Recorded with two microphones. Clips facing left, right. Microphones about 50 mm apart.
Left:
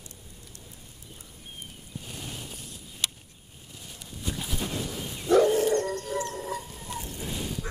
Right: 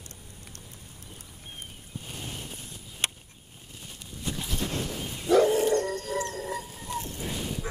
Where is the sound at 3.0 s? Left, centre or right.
Right.